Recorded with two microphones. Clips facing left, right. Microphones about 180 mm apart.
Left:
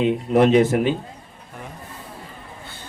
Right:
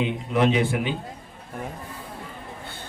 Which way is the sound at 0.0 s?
40° left (ahead or behind).